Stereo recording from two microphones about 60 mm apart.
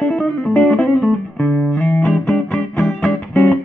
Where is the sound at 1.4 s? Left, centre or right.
Left.